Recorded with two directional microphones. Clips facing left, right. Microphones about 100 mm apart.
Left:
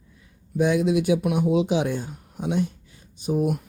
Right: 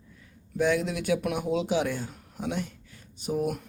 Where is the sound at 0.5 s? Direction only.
20° left (ahead or behind).